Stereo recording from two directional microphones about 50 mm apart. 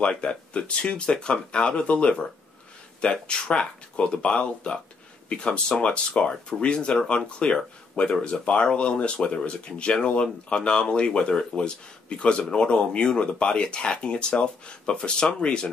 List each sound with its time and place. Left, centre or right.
0.0 s speech: centre